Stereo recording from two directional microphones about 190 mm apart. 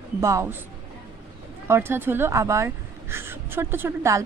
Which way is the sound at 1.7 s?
10° right (ahead or behind).